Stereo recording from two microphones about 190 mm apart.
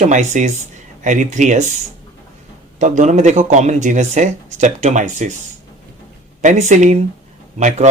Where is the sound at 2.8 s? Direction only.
40° right (ahead or behind).